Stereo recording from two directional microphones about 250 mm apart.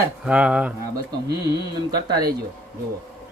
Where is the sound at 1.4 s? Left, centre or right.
Centre.